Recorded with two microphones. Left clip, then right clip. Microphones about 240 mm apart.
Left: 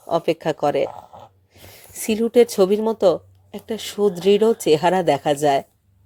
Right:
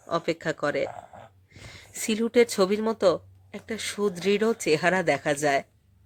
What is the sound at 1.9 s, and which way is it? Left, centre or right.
Speech, centre.